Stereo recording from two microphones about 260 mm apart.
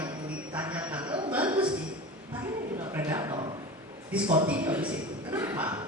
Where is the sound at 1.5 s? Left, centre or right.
Centre.